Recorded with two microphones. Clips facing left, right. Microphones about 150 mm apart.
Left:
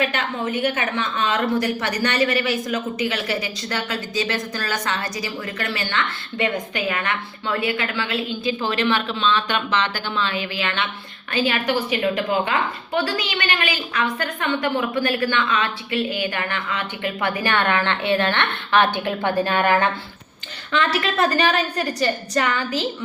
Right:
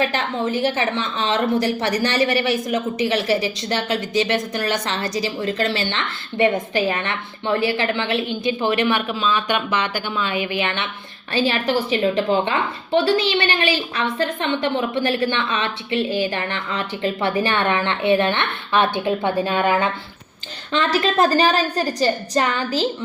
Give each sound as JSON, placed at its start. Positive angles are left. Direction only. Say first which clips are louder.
{"t": 0.0, "sound": "a woman's voice", "louder": "right 2 dB", "side_deg": -35}
{"t": 11.3, "sound": "a woman's voice", "louder": "right 2 dB", "side_deg": -30}
{"t": 20.7, "sound": "a woman's voice", "louder": "right 3 dB", "side_deg": -35}